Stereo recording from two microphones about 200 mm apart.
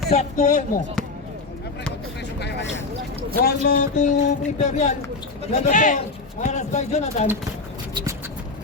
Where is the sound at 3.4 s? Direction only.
40° left (ahead or behind).